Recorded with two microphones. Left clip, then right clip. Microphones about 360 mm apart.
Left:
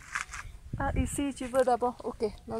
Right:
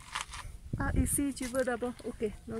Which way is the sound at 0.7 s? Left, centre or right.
Centre.